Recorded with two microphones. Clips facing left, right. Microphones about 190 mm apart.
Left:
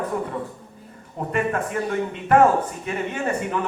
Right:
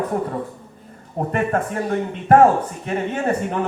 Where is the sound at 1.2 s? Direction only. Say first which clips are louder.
Right 3 dB; 40° right (ahead or behind).